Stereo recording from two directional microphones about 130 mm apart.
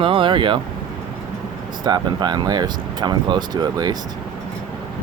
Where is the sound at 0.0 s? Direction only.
40° right (ahead or behind).